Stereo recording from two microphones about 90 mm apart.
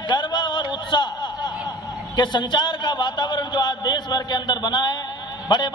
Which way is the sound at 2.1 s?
55° left (ahead or behind).